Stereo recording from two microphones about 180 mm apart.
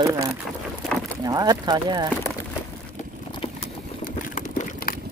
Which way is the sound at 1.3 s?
20° right (ahead or behind).